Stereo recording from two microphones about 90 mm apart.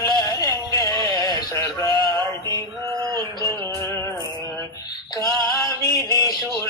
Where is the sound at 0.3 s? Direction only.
45° left (ahead or behind).